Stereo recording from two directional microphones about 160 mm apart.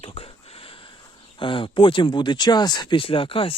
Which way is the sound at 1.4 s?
30° left (ahead or behind).